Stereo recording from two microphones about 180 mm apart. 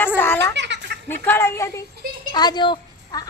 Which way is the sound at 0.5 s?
75° right (ahead or behind).